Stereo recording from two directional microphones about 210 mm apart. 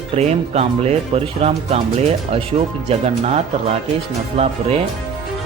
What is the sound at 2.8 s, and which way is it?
Speech, 30° right (ahead or behind).